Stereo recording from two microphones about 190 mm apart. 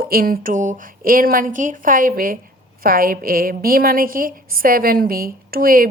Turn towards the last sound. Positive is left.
turn(degrees=-50)  # may be behind; listen again after turning